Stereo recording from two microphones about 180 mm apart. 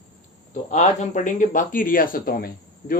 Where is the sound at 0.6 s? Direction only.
40° left (ahead or behind).